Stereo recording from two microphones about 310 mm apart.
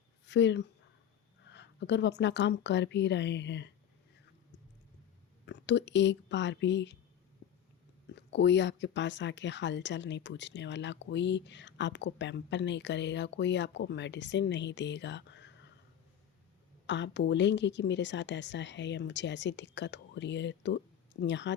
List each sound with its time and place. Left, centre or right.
0.3 s speech: left
5.5 s speech: left
8.1 s speech: left
16.8 s speech: left